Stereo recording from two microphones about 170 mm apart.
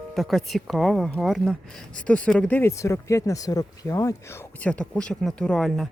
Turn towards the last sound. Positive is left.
turn(degrees=0)  # may be behind; listen again after turning